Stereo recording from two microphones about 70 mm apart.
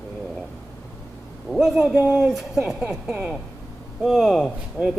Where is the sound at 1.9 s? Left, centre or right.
Right.